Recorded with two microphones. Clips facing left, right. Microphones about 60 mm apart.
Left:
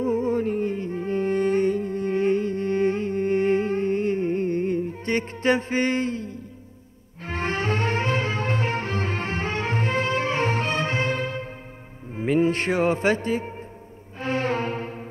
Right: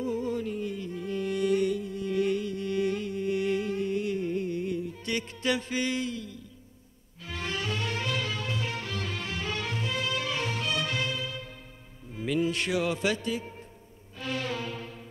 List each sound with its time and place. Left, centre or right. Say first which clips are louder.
0.0 s music: left 7 dB; left